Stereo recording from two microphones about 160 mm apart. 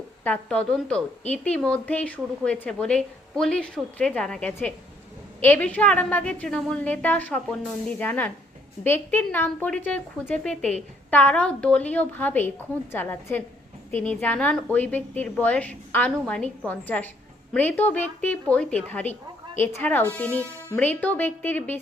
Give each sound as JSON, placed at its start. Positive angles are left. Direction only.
{"t": 0.3, "sound": "a woman's voice", "side_deg": 5}